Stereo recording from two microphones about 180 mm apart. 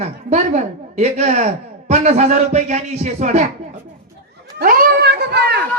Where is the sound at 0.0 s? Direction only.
40° right (ahead or behind).